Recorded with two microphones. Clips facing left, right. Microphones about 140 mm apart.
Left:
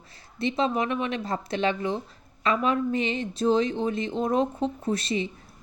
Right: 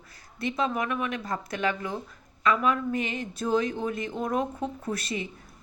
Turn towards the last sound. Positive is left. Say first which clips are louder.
# left 5 dB
turn(degrees=25)  # may be behind; listen again after turning